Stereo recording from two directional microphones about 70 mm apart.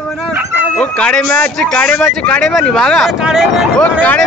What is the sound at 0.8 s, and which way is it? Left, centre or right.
Speech, centre.